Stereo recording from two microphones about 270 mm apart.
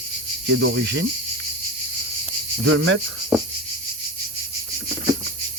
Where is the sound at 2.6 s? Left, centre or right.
Right.